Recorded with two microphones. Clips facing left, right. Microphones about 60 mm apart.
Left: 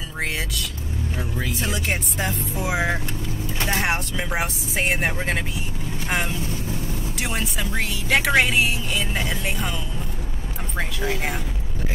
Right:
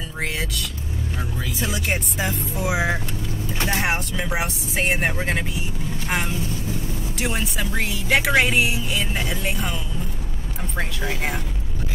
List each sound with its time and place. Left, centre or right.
0.2 s vehicle: centre
1.6 s a woman's voice: centre
10.8 s a woman's voice: centre